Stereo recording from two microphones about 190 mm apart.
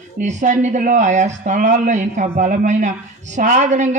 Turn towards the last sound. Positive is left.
turn(degrees=-40)  # may be behind; listen again after turning